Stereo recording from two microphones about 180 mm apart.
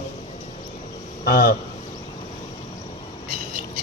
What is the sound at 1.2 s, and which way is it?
Speech, 55° left (ahead or behind).